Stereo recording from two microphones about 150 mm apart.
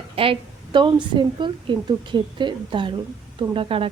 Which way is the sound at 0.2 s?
35° right (ahead or behind).